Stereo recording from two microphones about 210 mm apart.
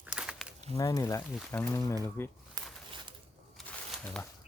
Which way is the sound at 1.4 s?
5° left (ahead or behind).